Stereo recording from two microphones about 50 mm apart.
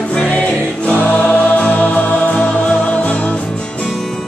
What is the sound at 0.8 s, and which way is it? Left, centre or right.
Choir, left.